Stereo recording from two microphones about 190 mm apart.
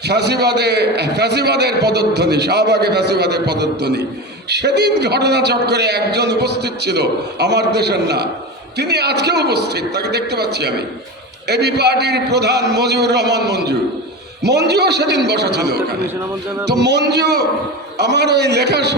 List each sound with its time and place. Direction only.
0.1 s a man's voice: 60° right (ahead or behind)